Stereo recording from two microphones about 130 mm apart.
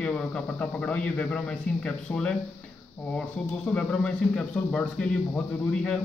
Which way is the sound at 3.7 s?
10° left (ahead or behind).